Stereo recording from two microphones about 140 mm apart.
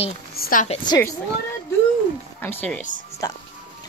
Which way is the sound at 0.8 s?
20° left (ahead or behind).